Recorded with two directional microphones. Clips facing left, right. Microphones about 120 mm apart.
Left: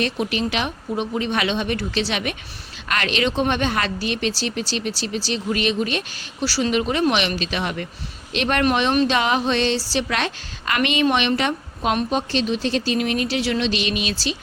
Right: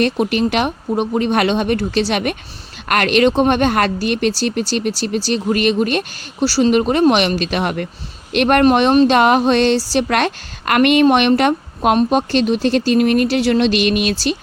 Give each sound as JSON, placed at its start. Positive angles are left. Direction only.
{"t": 0.0, "sound": "speech", "side_deg": -50}
{"t": 6.4, "sound": "a woman's voice", "side_deg": -40}